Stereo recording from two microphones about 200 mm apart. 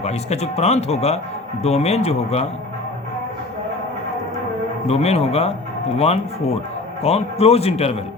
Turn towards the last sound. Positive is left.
turn(degrees=30)  # may be behind; listen again after turning